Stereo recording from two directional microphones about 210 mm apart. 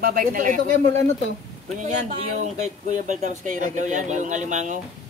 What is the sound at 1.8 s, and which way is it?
Speech, 35° right (ahead or behind).